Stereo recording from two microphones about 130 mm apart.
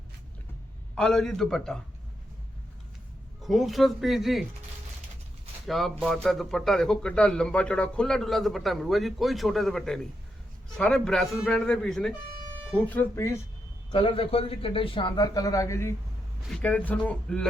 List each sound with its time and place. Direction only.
0.9 s a man's voice: 5° left (ahead or behind)
3.4 s a man's voice: centre (ahead or behind)
5.6 s a man's voice: centre (ahead or behind); by 13.4 s 20° left (ahead or behind)
13.9 s a man's voice: 45° left (ahead or behind); by 15.9 s 25° left (ahead or behind)
16.5 s speech: 10° left (ahead or behind)